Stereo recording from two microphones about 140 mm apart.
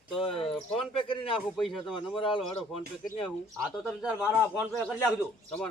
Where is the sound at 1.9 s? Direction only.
35° left (ahead or behind).